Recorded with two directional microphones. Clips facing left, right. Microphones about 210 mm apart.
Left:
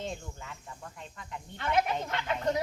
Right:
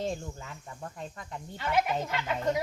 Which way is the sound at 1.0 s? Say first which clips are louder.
Right 1 dB; 40° right (ahead or behind).